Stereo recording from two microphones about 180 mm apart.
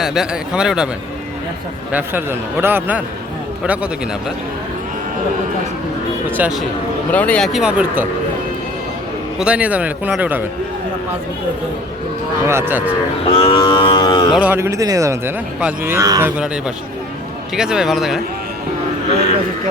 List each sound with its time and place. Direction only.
0.0 s speech: centre (ahead or behind)
1.9 s a man's voice: 10° right (ahead or behind)
6.3 s speech: 5° right (ahead or behind)
7.1 s speech: 10° left (ahead or behind)
9.4 s a man's voice: 5° right (ahead or behind)
12.5 s a man's voice: 15° right (ahead or behind)
13.2 s cattle: 30° left (ahead or behind)
14.4 s a man's voice: 15° right (ahead or behind)
17.5 s speech: 5° right (ahead or behind)